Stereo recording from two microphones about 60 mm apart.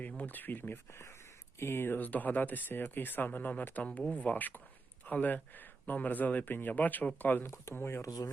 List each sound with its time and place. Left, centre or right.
0.2 s speech: left
1.5 s speech: left
7.4 s speech: left
8.0 s speech: left